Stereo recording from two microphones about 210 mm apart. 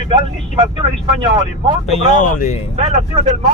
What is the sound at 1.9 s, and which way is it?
Speech, 35° left (ahead or behind).